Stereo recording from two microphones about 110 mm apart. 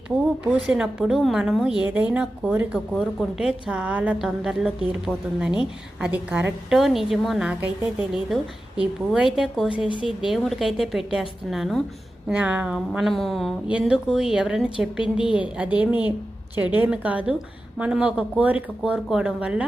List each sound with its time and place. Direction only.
0.7 s a woman's voice: 5° right (ahead or behind)
6.7 s a woman's voice: centre (ahead or behind)
13.7 s a woman's voice: 10° right (ahead or behind)
15.0 s a woman's voice: 50° left (ahead or behind)
15.4 s a woman's voice: 10° right (ahead or behind)